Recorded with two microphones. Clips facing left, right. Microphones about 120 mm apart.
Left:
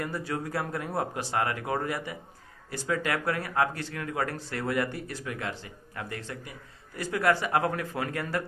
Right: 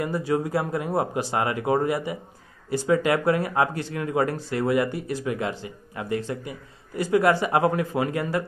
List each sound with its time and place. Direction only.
0.0 s speech: 15° right (ahead or behind)